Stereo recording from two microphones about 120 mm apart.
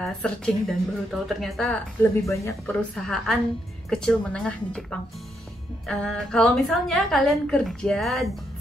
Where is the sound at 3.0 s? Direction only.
5° left (ahead or behind).